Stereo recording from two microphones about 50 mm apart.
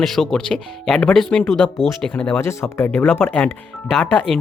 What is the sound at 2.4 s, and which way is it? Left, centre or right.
Speech, left.